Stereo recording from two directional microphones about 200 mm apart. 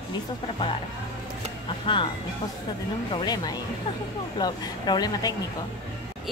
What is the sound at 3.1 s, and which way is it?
Speech, 20° left (ahead or behind).